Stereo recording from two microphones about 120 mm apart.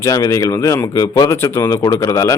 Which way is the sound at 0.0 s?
25° left (ahead or behind).